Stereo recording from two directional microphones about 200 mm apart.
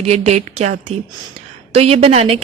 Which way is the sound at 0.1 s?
35° right (ahead or behind).